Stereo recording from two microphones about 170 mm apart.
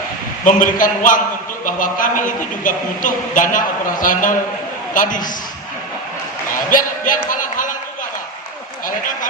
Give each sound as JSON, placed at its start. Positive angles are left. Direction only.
{"t": 0.4, "sound": "a man's voice", "side_deg": 50}
{"t": 6.7, "sound": "music", "side_deg": 50}